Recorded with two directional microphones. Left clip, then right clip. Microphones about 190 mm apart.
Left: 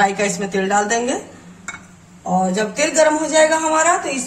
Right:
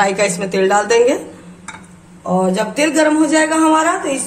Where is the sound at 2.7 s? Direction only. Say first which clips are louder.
Right 1 dB; 55° right (ahead or behind).